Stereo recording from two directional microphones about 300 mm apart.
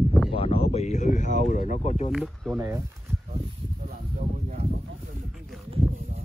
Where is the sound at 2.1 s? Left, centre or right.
Centre.